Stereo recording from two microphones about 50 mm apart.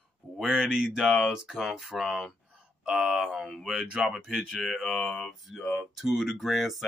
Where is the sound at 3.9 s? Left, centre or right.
Centre.